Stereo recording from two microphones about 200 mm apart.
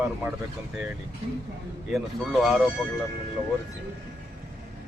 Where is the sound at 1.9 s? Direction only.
Centre (ahead or behind).